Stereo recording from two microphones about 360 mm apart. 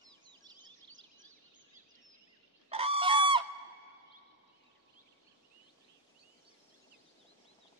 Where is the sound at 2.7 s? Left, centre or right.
Centre.